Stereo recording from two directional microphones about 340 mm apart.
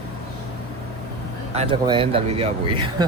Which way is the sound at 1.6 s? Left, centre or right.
Centre.